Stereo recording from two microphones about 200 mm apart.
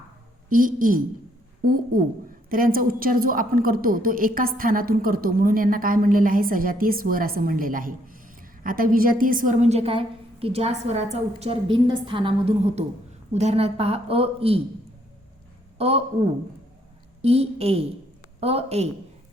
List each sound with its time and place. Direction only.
0.4 s a woman's voice: 45° right (ahead or behind)
15.8 s speech: 30° right (ahead or behind)
17.2 s a woman's voice: 30° right (ahead or behind)